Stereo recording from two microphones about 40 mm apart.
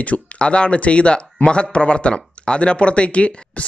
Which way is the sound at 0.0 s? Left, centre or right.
Left.